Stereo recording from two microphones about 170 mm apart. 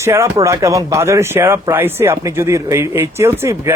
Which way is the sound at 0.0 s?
15° right (ahead or behind).